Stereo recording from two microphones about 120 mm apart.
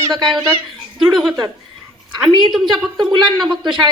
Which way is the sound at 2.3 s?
40° right (ahead or behind).